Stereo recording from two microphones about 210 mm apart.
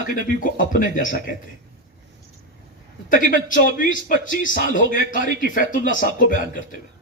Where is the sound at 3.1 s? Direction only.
40° left (ahead or behind).